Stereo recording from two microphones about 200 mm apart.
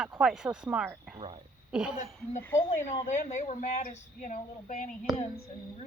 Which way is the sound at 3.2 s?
35° left (ahead or behind).